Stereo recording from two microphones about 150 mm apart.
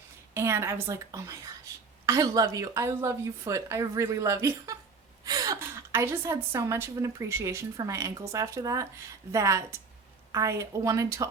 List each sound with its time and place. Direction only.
0.3 s a woman's voice: 20° right (ahead or behind)